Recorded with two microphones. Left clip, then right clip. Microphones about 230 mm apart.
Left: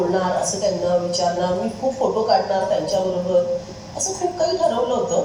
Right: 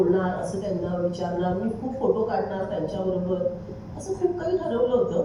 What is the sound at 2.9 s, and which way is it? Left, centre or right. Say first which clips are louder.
A woman's voice: left 8 dB; centre.